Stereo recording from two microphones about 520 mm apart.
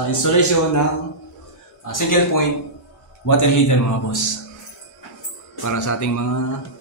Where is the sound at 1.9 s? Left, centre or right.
Left.